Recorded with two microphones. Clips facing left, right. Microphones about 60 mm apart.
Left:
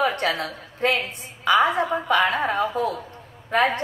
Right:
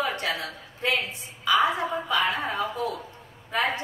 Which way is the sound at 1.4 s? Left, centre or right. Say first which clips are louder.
Left 4 dB; left.